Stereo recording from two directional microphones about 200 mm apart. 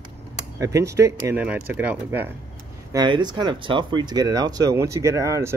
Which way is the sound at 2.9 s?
20° right (ahead or behind).